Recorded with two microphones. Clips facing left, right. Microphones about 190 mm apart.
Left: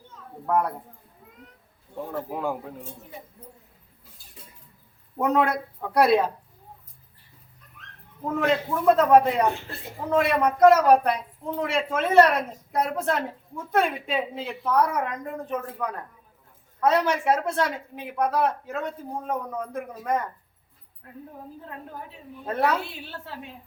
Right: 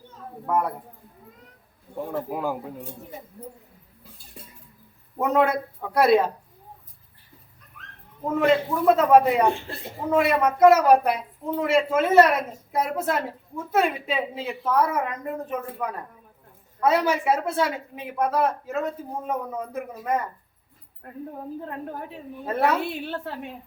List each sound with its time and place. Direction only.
0.4 s speech: 5° right (ahead or behind)
2.1 s speech: 5° right (ahead or behind)
5.1 s speech: centre (ahead or behind)
8.4 s speech: centre (ahead or behind)
21.0 s a woman's voice: 55° right (ahead or behind)
22.4 s speech: 5° right (ahead or behind)
23.0 s a woman's voice: 55° right (ahead or behind)